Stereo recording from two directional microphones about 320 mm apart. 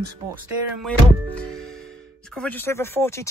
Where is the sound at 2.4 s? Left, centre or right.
Centre.